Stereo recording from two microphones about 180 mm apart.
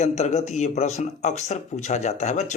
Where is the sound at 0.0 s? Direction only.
40° left (ahead or behind).